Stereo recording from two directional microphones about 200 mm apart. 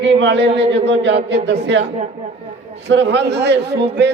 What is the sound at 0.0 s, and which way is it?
A man's voice, 65° right (ahead or behind).